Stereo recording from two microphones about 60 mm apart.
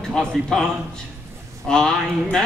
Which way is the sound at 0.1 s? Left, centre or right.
Centre.